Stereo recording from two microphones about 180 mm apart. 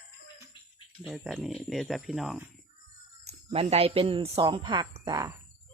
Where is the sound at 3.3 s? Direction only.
35° right (ahead or behind); by 5.3 s 20° right (ahead or behind).